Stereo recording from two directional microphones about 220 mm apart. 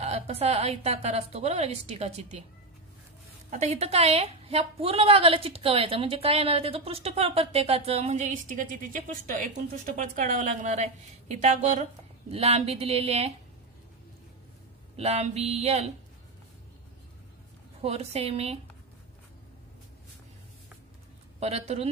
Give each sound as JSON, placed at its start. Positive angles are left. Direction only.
{"t": 0.0, "sound": "a woman's voice", "side_deg": -30}
{"t": 3.4, "sound": "a woman's voice", "side_deg": -30}
{"t": 15.0, "sound": "a woman's voice", "side_deg": -30}
{"t": 17.8, "sound": "a woman's voice", "side_deg": -30}
{"t": 21.4, "sound": "a woman's voice", "side_deg": -30}